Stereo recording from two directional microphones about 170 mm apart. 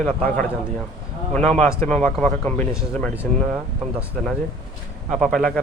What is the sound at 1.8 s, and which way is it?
Speech, 5° left (ahead or behind).